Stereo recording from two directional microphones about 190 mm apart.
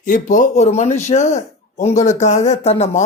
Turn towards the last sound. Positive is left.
turn(degrees=35)  # may be behind; listen again after turning